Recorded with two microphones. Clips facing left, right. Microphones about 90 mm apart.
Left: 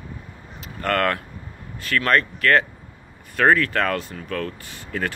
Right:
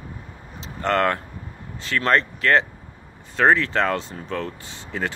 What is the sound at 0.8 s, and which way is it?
Speech, 20° right (ahead or behind).